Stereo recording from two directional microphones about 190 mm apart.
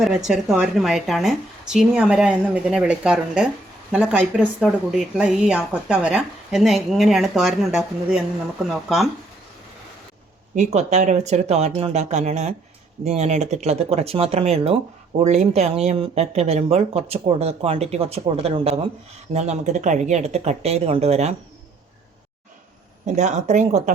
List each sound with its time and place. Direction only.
0.0 s speech: centre (ahead or behind)
10.5 s speech: 35° right (ahead or behind)
23.0 s speech: 40° right (ahead or behind)